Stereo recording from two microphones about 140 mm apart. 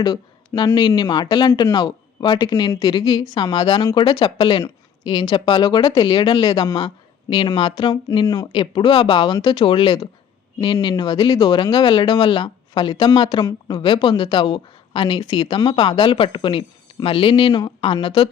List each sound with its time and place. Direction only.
0.0 s speech: 30° left (ahead or behind)